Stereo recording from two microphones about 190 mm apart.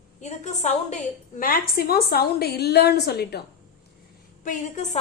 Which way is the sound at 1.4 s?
50° left (ahead or behind).